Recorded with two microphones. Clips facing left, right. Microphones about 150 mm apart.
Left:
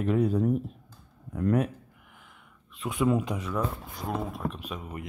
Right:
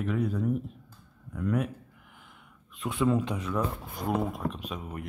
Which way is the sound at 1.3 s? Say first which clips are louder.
Left 4 dB; 45° left (ahead or behind).